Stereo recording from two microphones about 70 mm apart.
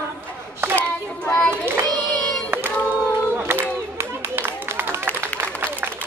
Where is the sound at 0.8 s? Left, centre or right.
Left.